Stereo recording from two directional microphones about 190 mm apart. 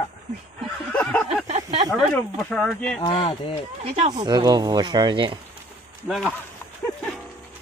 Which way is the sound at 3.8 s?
35° right (ahead or behind).